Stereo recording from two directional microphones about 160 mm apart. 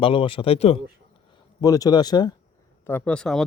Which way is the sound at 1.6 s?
20° left (ahead or behind).